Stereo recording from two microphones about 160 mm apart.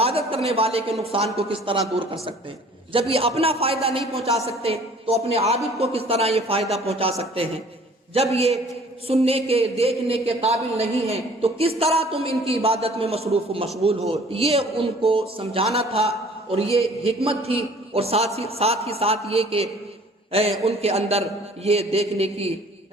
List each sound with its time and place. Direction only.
0.0 s a sound: 40° right (ahead or behind)
1.0 s speech: 40° right (ahead or behind)
2.9 s speech: 35° right (ahead or behind)